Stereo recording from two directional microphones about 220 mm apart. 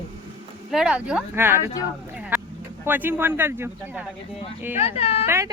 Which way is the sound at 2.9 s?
10° right (ahead or behind).